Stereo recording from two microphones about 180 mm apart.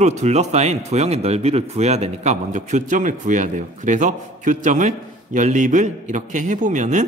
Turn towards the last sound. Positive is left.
turn(degrees=-45)  # may be behind; listen again after turning